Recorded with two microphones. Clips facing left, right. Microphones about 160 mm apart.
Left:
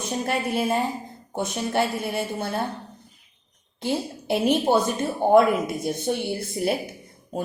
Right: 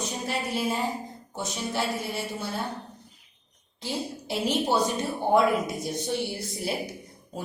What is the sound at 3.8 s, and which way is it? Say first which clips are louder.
A woman's voice: left 6 dB; 55° left (ahead or behind).